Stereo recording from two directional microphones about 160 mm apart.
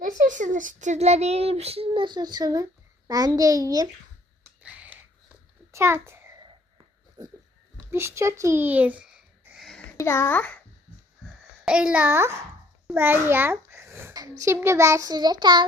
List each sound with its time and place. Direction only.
0.0 s a child's voice: 55° right (ahead or behind); by 3.8 s 20° right (ahead or behind)
4.6 s a sound: 10° right (ahead or behind)
5.7 s a child's voice: 15° right (ahead or behind)
7.2 s speech: 25° right (ahead or behind)
7.9 s a sound: 15° right (ahead or behind); by 9.8 s centre (ahead or behind)
10.0 s a child's voice: 15° left (ahead or behind)
11.6 s a child's voice: 5° right (ahead or behind); by 15.6 s 30° right (ahead or behind)